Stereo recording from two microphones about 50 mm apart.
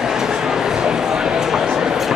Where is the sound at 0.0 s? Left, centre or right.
Centre.